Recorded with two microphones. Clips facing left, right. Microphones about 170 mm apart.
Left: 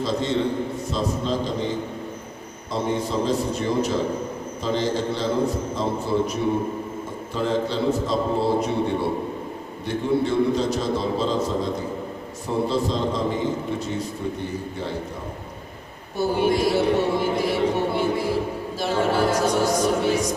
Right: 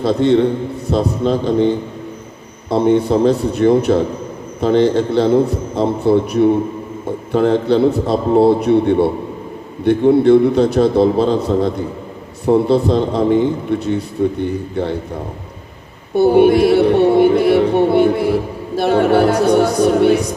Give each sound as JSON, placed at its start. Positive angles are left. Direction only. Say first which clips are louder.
{"t": 0.0, "sound": "music", "louder": "right 10 dB", "side_deg": -60}
{"t": 16.1, "sound": "music", "louder": "right 11 dB", "side_deg": -65}